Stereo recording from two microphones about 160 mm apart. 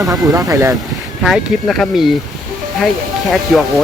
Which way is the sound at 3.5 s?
5° right (ahead or behind).